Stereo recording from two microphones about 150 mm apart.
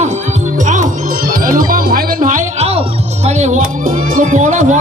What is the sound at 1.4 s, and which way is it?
Music, 70° right (ahead or behind).